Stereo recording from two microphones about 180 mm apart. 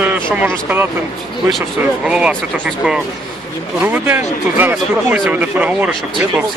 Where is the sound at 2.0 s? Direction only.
5° right (ahead or behind).